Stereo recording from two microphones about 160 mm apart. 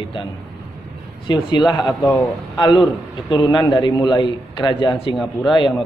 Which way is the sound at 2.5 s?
25° left (ahead or behind).